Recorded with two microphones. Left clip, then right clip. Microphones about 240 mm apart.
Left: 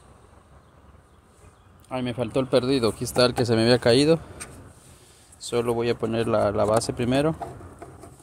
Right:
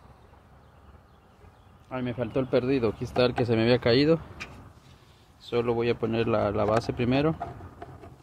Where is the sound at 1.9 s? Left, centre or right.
Centre.